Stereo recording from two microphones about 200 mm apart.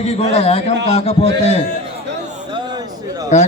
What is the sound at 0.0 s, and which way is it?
A man's voice, 30° left (ahead or behind).